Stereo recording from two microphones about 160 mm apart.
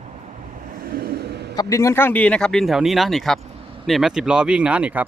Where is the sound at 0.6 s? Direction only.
60° right (ahead or behind); by 1.5 s 90° right.